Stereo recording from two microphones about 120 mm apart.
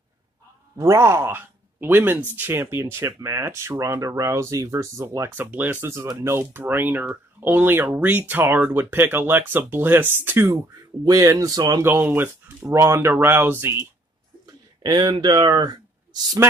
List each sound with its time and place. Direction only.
0.7 s speech: 25° right (ahead or behind)
11.1 s speech: 30° right (ahead or behind)
11.8 s speech: 20° right (ahead or behind)
14.4 s bird: 35° right (ahead or behind)